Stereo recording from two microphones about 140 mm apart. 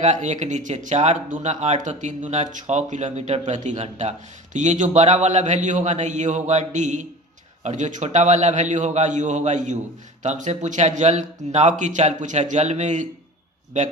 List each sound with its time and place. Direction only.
0.0 s speech: 55° right (ahead or behind)